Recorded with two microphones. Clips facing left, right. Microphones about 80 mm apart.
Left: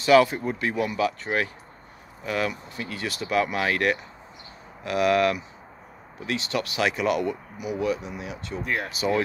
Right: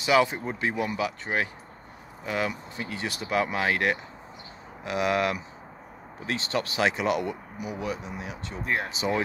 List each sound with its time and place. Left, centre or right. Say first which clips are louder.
0.0 s speech: left 5 dB; centre
6.1 s speech: left 1 dB; right